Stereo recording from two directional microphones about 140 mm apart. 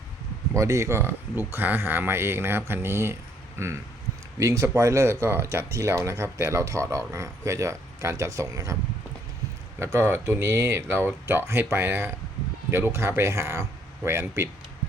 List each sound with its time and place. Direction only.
0.5 s speech: 20° right (ahead or behind)
9.8 s speech: 20° right (ahead or behind)